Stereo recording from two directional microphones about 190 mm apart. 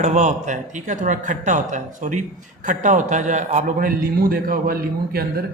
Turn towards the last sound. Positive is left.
turn(degrees=-55)  # may be behind; listen again after turning